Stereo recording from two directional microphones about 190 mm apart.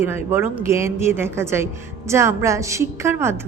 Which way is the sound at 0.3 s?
10° right (ahead or behind).